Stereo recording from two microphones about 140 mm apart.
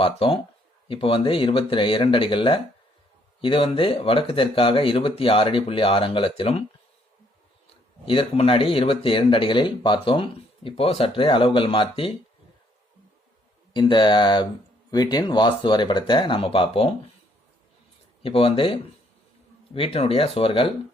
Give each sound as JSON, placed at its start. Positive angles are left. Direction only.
{"t": 0.0, "sound": "speech", "side_deg": 40}
{"t": 8.0, "sound": "speech", "side_deg": 40}
{"t": 13.7, "sound": "speech", "side_deg": 35}
{"t": 18.2, "sound": "speech", "side_deg": 40}